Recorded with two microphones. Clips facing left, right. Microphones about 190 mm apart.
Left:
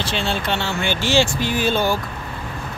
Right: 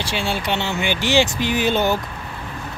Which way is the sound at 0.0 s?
10° right (ahead or behind).